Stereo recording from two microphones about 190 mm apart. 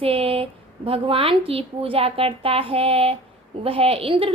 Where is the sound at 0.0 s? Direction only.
30° right (ahead or behind).